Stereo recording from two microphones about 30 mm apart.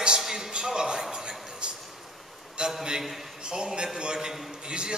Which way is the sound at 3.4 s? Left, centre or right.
Right.